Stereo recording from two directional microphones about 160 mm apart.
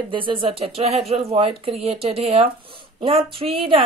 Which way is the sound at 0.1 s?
30° right (ahead or behind).